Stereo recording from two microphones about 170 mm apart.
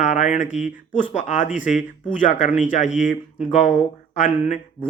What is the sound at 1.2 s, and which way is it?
Speech, 45° left (ahead or behind).